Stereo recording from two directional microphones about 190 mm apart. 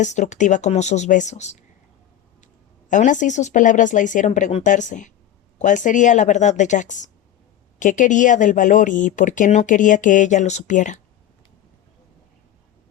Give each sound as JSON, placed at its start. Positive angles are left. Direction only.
{"t": 0.0, "sound": "speech", "side_deg": 40}
{"t": 2.9, "sound": "speech", "side_deg": 40}